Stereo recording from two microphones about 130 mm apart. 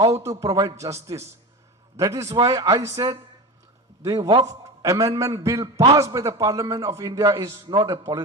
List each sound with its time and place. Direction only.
0.1 s a man's voice: 25° right (ahead or behind)